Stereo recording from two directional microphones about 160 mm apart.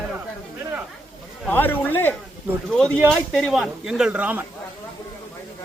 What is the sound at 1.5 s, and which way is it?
Speech, 10° left (ahead or behind).